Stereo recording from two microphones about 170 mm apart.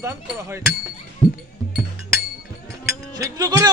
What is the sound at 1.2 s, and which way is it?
Music, 20° right (ahead or behind).